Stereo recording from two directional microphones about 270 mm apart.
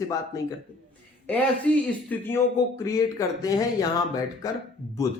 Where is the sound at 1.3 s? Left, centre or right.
Centre.